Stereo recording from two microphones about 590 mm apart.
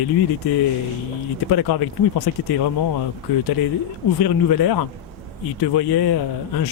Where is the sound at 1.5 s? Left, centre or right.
Left.